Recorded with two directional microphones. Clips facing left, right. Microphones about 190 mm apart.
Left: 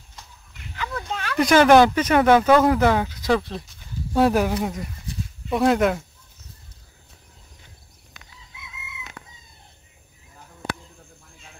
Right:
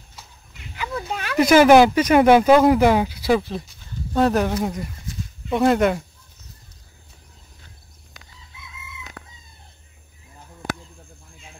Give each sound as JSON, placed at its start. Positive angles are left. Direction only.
{"t": 0.7, "sound": "speech", "side_deg": -10}
{"t": 4.1, "sound": "speech", "side_deg": 10}
{"t": 9.2, "sound": "chicken", "side_deg": -75}